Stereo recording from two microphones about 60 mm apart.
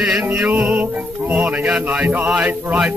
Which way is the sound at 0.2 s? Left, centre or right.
Right.